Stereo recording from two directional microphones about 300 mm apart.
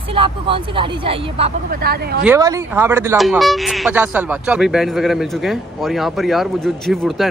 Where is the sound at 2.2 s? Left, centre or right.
Centre.